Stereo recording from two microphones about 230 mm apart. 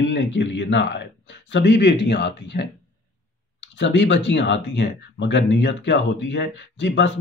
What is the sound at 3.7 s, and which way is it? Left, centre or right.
Speech, left.